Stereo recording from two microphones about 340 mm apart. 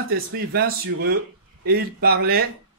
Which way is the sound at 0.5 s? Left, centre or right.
Right.